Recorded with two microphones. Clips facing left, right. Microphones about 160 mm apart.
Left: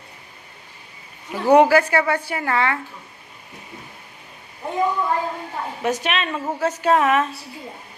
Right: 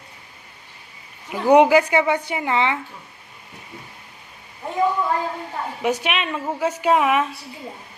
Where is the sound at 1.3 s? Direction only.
15° right (ahead or behind).